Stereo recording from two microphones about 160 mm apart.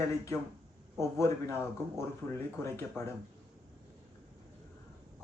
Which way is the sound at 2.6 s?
15° left (ahead or behind).